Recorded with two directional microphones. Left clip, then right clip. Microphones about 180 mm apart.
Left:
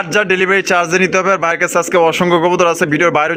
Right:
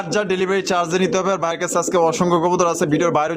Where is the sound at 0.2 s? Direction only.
5° left (ahead or behind).